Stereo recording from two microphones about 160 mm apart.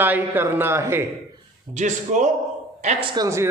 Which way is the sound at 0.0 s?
10° right (ahead or behind).